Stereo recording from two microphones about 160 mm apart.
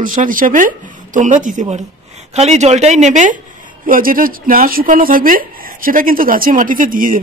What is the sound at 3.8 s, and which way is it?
Speech, 60° right (ahead or behind).